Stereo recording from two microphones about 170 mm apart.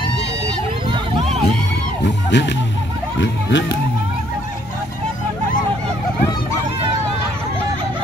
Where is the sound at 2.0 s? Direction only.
90° left.